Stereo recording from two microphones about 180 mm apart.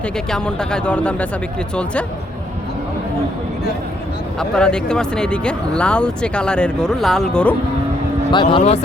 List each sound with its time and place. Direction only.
0.3 s speech: 5° left (ahead or behind)
4.4 s speech: 5° left (ahead or behind)
8.3 s speech: 25° left (ahead or behind)